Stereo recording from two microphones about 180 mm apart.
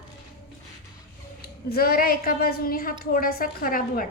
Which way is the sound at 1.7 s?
55° left (ahead or behind).